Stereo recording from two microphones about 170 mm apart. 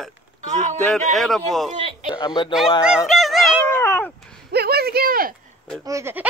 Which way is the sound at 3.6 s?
15° left (ahead or behind).